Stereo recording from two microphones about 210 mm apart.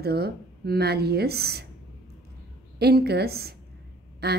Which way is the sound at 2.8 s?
50° right (ahead or behind).